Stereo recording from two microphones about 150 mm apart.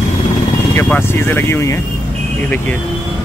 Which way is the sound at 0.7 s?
15° left (ahead or behind).